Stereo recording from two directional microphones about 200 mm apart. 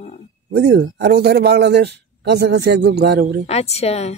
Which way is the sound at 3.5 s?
30° left (ahead or behind).